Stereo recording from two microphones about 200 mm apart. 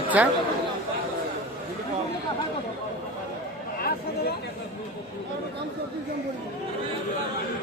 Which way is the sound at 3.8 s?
50° left (ahead or behind).